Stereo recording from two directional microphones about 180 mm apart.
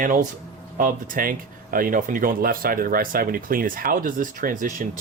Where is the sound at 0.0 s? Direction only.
50° right (ahead or behind).